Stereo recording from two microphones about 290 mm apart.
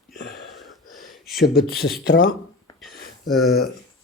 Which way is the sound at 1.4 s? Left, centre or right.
Left.